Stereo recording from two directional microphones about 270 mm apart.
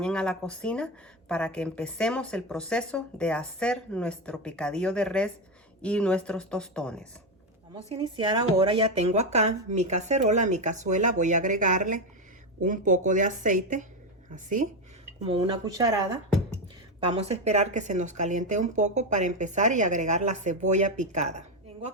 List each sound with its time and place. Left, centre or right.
0.0 s speech: centre
7.9 s speech: centre
17.1 s speech: right